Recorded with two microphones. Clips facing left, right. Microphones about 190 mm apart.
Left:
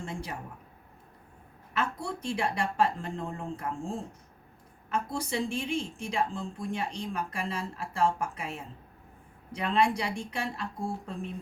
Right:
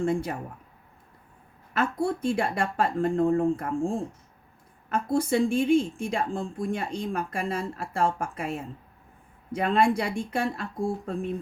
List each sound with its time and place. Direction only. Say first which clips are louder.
0.0 s speech: right 11 dB; 50° right (ahead or behind)
1.8 s speech: right 8 dB; 50° right (ahead or behind)